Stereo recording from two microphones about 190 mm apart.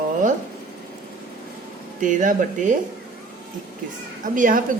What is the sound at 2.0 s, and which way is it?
Speech, 45° right (ahead or behind).